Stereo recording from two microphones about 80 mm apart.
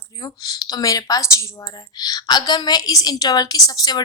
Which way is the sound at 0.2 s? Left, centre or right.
Left.